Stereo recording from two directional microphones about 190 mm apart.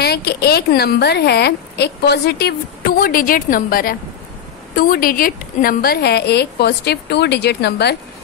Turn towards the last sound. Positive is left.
turn(degrees=60)  # may be behind; listen again after turning